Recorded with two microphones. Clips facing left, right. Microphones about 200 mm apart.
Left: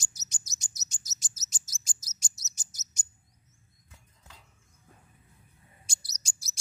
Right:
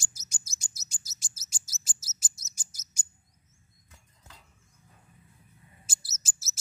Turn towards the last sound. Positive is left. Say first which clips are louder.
# right 1 dB
turn(degrees=-5)  # may be behind; listen again after turning